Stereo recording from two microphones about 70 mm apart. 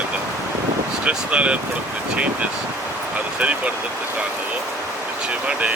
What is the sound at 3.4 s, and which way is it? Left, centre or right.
Speech, centre.